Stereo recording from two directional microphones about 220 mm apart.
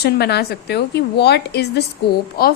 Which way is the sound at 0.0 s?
50° left (ahead or behind).